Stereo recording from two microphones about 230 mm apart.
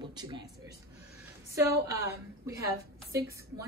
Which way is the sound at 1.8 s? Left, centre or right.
Centre.